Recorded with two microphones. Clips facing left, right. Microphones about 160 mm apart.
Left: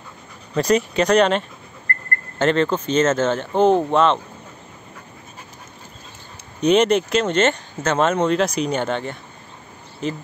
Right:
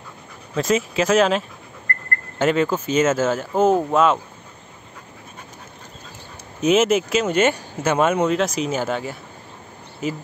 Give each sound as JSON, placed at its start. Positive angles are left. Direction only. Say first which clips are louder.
{"t": 0.6, "sound": "speech", "louder": "left 2 dB", "side_deg": 0}
{"t": 1.9, "sound": "a sound", "louder": "left 1 dB", "side_deg": 30}
{"t": 2.3, "sound": "speech", "louder": "left 1 dB", "side_deg": -10}
{"t": 6.6, "sound": "speech", "louder": "left 1 dB", "side_deg": -5}